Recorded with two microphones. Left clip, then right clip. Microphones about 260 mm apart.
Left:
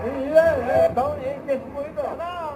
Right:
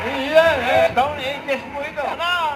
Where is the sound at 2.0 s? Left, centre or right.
Centre.